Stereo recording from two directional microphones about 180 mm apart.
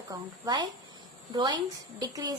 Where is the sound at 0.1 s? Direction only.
20° right (ahead or behind).